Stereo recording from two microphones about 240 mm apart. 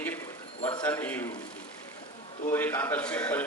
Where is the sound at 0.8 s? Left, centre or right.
Centre.